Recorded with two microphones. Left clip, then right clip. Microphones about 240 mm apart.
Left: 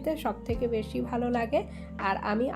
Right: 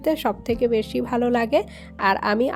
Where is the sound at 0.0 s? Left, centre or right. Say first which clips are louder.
Right 8 dB; right.